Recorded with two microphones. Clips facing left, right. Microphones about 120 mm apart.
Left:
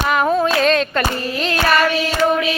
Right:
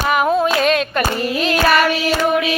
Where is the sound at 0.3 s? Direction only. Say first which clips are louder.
Left 1 dB; 10° right (ahead or behind).